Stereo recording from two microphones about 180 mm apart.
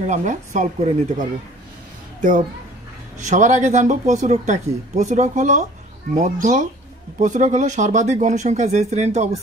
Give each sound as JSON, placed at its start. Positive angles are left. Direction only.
{"t": 0.0, "sound": "speech", "side_deg": -40}
{"t": 3.2, "sound": "speech", "side_deg": -40}